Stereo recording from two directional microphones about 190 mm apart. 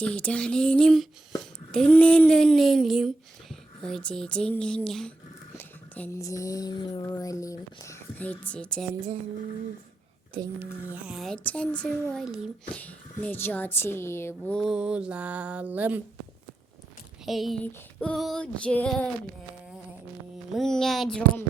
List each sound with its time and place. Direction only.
0.0 s a child's voice: 5° left (ahead or behind)
5.5 s a sound: 10° left (ahead or behind)
10.6 s a child's voice: 10° right (ahead or behind)
17.2 s a child's voice: centre (ahead or behind)
20.5 s a child's voice: centre (ahead or behind)